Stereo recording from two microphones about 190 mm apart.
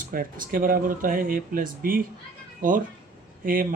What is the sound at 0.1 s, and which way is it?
Speech, 45° right (ahead or behind).